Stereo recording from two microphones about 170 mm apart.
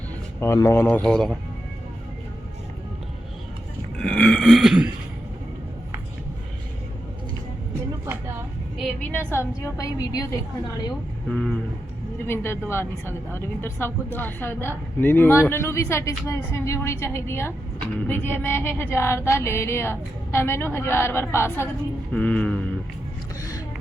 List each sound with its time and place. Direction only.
0.3 s speech: 15° left (ahead or behind)
3.9 s burping: 5° left (ahead or behind)
8.0 s speech: 10° right (ahead or behind)
9.1 s a woman's voice: 15° left (ahead or behind)
11.3 s guitar: 5° left (ahead or behind)
12.3 s speech: 15° left (ahead or behind)